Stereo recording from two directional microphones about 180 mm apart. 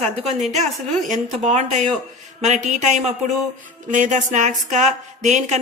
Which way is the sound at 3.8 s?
45° right (ahead or behind).